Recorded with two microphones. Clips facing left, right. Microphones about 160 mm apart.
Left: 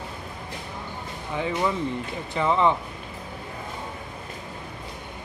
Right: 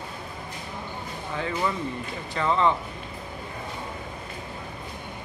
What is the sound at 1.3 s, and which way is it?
Speech, 15° left (ahead or behind).